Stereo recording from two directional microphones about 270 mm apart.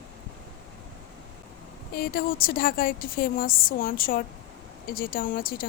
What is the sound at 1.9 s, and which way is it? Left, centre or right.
A woman's voice, left.